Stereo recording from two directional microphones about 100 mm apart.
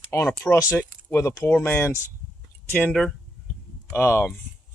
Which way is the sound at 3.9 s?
20° left (ahead or behind).